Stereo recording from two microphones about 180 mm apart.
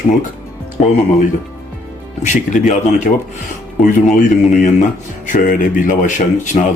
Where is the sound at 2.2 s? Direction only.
40° left (ahead or behind).